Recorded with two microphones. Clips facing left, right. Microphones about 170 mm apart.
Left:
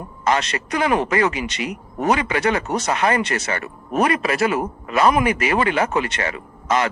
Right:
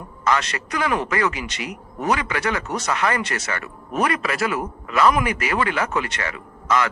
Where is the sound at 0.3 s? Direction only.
25° left (ahead or behind).